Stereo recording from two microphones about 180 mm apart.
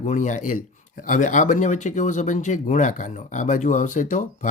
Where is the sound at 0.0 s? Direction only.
45° left (ahead or behind).